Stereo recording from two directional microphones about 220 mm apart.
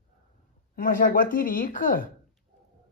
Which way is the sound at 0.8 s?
40° left (ahead or behind).